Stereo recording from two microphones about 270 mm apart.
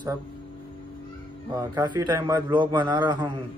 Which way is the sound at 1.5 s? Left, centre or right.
Centre.